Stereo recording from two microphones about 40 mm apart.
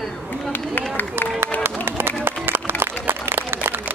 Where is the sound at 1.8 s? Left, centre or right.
Right.